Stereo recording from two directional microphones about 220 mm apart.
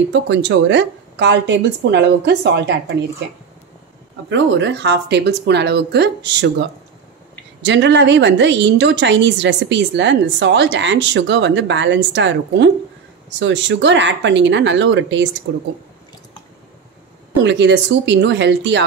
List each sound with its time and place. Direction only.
0.1 s a woman's voice: 55° right (ahead or behind)
4.3 s a woman's voice: 55° right (ahead or behind)
7.6 s a woman's voice: 55° right (ahead or behind)
17.4 s a woman's voice: 55° right (ahead or behind)